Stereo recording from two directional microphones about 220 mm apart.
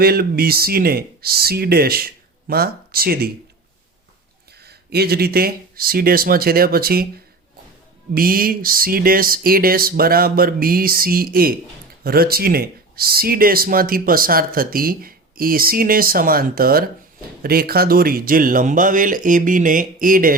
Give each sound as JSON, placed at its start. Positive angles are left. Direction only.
{"t": 0.0, "sound": "speech", "side_deg": -45}
{"t": 4.6, "sound": "speech", "side_deg": -45}
{"t": 8.1, "sound": "speech", "side_deg": -40}